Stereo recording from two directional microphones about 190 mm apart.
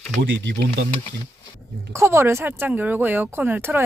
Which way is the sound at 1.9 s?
15° right (ahead or behind).